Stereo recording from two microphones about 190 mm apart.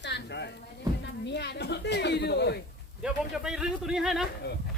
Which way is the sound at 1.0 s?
65° left (ahead or behind).